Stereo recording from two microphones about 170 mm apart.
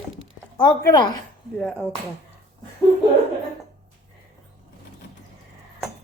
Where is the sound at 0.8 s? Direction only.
25° left (ahead or behind).